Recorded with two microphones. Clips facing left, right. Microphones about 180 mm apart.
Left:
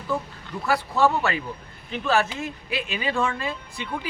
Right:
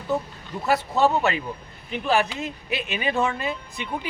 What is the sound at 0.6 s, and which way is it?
Speech, 20° right (ahead or behind).